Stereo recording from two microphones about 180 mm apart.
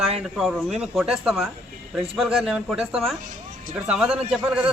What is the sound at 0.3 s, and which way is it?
A man's voice, centre (ahead or behind).